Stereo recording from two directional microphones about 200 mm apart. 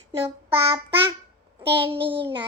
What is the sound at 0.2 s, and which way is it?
Child singing, 25° right (ahead or behind).